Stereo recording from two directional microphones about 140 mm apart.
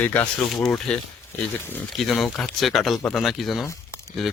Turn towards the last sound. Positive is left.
turn(degrees=0)  # may be behind; listen again after turning